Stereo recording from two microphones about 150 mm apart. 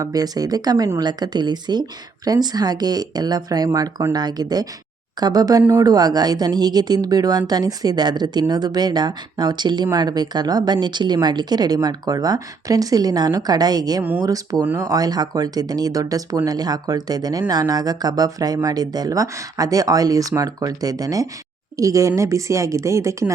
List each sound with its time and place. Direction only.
0.0 s speech: 25° right (ahead or behind)